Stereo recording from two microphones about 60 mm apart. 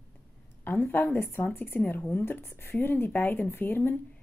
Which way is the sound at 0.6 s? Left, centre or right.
Left.